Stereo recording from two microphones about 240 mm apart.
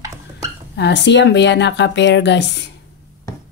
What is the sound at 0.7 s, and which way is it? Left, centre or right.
Speech, left.